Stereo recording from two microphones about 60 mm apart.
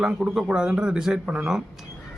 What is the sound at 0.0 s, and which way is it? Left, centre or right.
A man's voice, centre.